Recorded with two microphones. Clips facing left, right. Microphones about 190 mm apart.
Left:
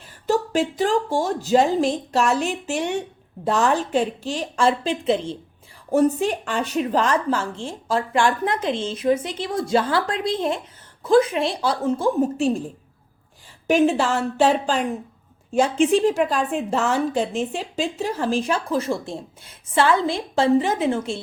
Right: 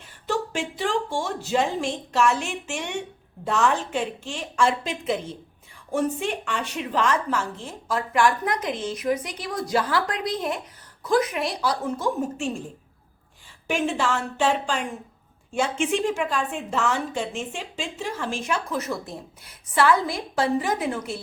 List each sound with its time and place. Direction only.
0.3 s a woman's voice: 40° left (ahead or behind)
13.7 s a woman's voice: 40° left (ahead or behind)